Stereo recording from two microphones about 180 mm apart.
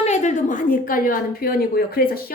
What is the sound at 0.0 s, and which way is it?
A woman's voice, 40° left (ahead or behind).